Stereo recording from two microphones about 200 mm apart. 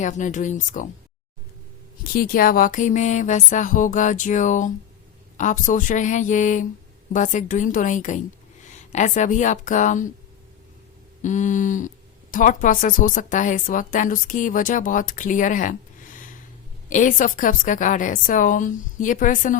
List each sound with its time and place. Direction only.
0.0 s a woman's voice: 40° left (ahead or behind)
2.1 s a woman's voice: 45° left (ahead or behind)
11.2 s a woman's voice: 40° left (ahead or behind)